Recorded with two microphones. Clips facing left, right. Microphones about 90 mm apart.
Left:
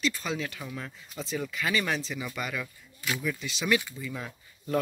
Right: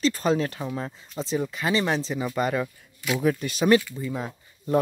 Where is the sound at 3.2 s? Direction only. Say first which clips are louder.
Right 12 dB; 50° right (ahead or behind).